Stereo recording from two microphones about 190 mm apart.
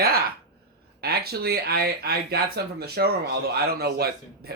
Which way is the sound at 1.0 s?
55° right (ahead or behind).